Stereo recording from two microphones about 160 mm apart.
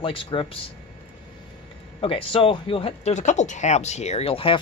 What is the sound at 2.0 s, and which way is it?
Speech, 35° left (ahead or behind).